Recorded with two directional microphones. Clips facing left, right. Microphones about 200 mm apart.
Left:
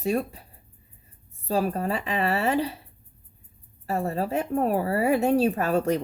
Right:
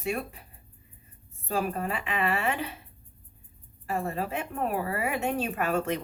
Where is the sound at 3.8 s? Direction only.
35° left (ahead or behind).